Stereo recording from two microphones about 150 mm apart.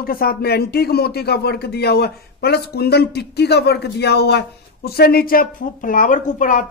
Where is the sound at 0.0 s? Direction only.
80° left.